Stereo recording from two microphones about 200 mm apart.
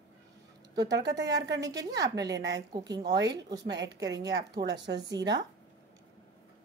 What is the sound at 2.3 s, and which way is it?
Speech, 60° right (ahead or behind).